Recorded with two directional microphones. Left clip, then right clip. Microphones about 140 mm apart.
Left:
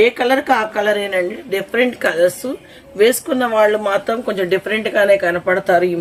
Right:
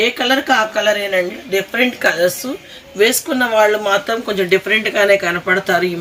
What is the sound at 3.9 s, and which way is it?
Speech, 45° left (ahead or behind).